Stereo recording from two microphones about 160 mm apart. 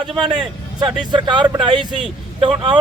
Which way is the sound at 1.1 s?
30° right (ahead or behind).